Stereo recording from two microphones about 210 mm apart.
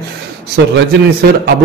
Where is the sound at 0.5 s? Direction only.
50° right (ahead or behind).